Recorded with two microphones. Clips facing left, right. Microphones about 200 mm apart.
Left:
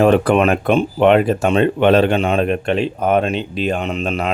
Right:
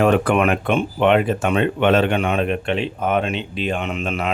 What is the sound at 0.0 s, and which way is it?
Speech, 35° left (ahead or behind).